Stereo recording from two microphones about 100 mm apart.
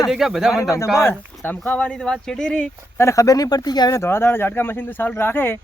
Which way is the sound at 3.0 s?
30° left (ahead or behind).